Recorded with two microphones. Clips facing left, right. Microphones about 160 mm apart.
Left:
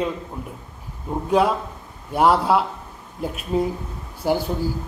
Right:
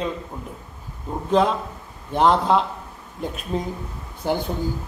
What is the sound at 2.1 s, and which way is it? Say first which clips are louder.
A man's voice: even; 10° left (ahead or behind).